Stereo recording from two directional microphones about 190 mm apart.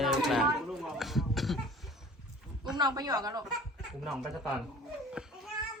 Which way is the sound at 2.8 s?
20° right (ahead or behind).